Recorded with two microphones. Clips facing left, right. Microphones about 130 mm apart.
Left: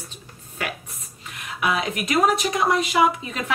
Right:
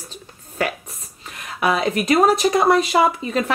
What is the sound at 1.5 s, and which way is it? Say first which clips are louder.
Speech: right 5 dB; 35° right (ahead or behind).